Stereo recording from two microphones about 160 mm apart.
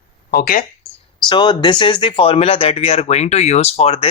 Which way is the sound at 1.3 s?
25° left (ahead or behind).